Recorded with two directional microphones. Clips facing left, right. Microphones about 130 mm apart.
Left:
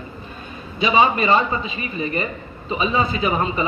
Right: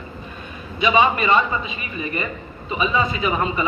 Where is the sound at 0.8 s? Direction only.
30° left (ahead or behind).